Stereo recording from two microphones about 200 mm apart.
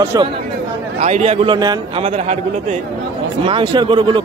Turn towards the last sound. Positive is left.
turn(degrees=-25)  # may be behind; listen again after turning